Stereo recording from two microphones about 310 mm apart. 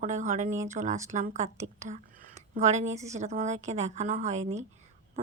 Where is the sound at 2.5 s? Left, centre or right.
Right.